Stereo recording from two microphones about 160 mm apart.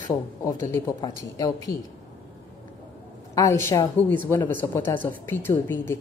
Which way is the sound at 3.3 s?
20° left (ahead or behind).